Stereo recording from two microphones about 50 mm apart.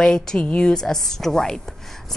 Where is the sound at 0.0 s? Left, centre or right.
Centre.